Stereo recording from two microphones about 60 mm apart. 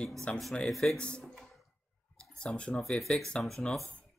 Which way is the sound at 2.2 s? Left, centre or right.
Centre.